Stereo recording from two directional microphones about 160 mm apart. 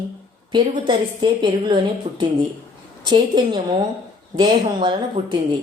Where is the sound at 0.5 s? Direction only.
30° right (ahead or behind).